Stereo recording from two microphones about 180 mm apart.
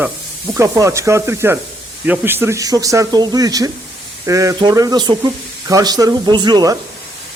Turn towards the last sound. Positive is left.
turn(degrees=-20)  # may be behind; listen again after turning